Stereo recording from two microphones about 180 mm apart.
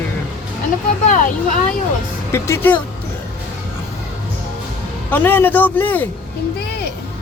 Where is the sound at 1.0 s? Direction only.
45° left (ahead or behind).